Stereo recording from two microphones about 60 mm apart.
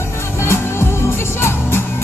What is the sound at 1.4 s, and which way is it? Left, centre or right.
Music, left.